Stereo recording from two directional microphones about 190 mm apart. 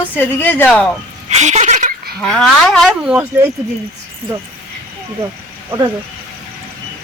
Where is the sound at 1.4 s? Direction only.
40° right (ahead or behind).